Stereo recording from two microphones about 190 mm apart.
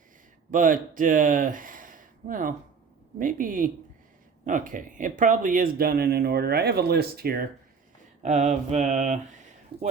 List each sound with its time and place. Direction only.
0.5 s speech: 45° right (ahead or behind)
8.2 s mantra: 40° right (ahead or behind)